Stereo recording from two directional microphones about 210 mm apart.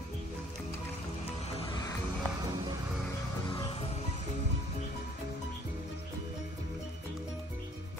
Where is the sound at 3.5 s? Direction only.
25° left (ahead or behind).